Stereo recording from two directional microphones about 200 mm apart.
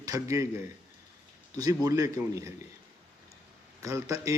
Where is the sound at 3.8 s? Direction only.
15° right (ahead or behind).